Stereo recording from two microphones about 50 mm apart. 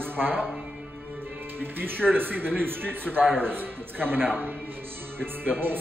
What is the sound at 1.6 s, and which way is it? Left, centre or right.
A man's voice, right.